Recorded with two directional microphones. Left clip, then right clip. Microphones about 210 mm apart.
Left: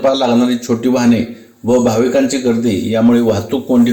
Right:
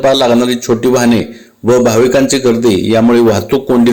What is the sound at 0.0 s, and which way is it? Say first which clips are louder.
A man's voice: right 4 dB; 50° right (ahead or behind).